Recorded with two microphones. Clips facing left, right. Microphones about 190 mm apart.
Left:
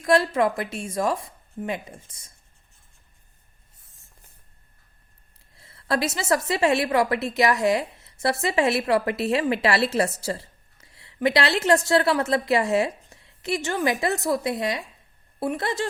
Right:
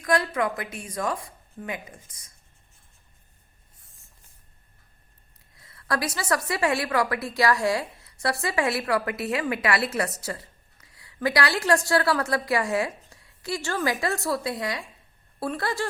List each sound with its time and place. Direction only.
0.0 s a woman's voice: 25° left (ahead or behind)
5.5 s a woman's voice: 25° left (ahead or behind)